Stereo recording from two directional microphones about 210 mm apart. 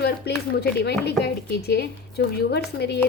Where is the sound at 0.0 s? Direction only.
50° left (ahead or behind).